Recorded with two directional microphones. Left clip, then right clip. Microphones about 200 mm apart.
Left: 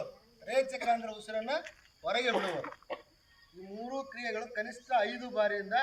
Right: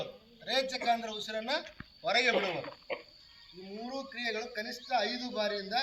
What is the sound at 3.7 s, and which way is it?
A man's voice, 35° left (ahead or behind).